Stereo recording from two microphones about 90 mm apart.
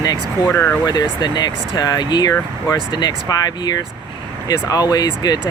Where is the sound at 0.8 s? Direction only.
55° left (ahead or behind).